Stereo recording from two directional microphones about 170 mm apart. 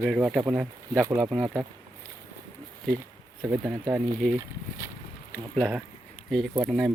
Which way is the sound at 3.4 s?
10° right (ahead or behind).